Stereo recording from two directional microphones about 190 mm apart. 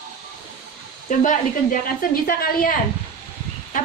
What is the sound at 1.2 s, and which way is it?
A woman's voice, 45° left (ahead or behind).